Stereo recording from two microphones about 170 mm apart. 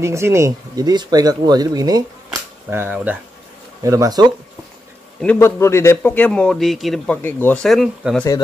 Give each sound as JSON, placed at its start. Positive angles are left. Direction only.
{"t": 0.0, "sound": "speech", "side_deg": -15}
{"t": 2.7, "sound": "speech", "side_deg": -10}
{"t": 5.2, "sound": "a man's voice", "side_deg": 10}
{"t": 7.2, "sound": "speech", "side_deg": 10}